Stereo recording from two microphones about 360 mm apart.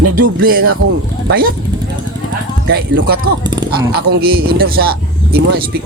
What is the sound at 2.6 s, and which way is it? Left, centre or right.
Speech, right.